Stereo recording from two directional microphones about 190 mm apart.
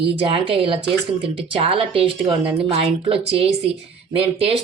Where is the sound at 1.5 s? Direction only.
30° right (ahead or behind).